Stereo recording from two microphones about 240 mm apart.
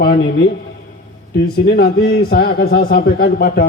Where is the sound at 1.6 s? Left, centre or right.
Left.